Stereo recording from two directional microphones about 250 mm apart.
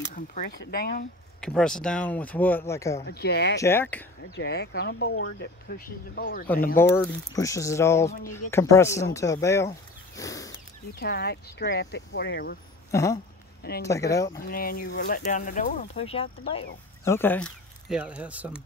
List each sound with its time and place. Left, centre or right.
0.1 s speech: left
1.4 s speech: centre
3.1 s speech: left
3.5 s speech: centre
4.2 s speech: left
5.7 s speech: left
6.4 s speech: centre
10.1 s a sound: centre
11.0 s speech: left
12.9 s speech: centre
13.6 s speech: left
13.8 s speech: centre
14.4 s speech: left
17.0 s speech: centre